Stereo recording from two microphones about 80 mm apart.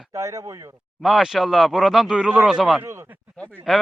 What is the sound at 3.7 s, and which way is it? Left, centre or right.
Speech, centre.